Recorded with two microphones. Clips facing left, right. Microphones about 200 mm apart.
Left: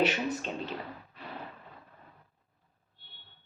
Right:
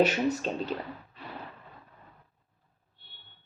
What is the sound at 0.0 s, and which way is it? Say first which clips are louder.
Speech: right 4 dB; 40° right (ahead or behind).